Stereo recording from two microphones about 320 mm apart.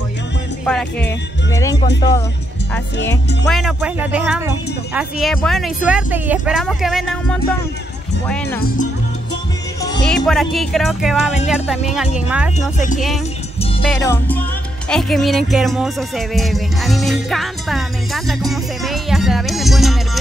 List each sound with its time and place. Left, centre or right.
0.7 s speech: centre
3.0 s speech: left
3.4 s speech: centre
9.8 s music: centre
10.1 s speech: centre
12.5 s speech: left
13.6 s music: centre
13.8 s speech: centre
14.9 s music: centre